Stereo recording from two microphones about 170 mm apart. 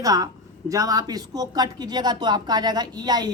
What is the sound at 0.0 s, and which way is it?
Speech, 20° right (ahead or behind).